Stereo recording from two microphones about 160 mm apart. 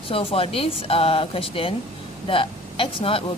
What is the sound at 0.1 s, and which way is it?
Speech, 35° left (ahead or behind).